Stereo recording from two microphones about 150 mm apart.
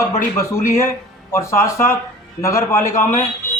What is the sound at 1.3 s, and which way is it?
Speech, 20° left (ahead or behind).